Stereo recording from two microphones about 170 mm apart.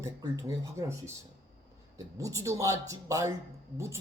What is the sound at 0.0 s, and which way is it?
Speech, 20° right (ahead or behind).